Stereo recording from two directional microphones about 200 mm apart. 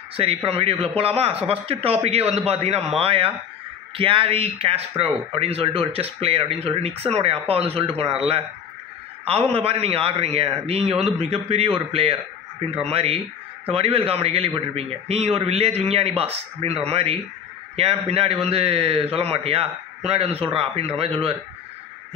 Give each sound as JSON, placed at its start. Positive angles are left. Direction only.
{"t": 0.1, "sound": "a man's voice", "side_deg": -30}
{"t": 9.5, "sound": "speech", "side_deg": -30}